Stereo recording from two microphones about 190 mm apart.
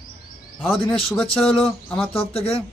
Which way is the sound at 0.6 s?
10° left (ahead or behind).